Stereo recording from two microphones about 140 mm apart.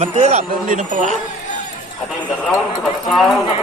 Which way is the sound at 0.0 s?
50° right (ahead or behind).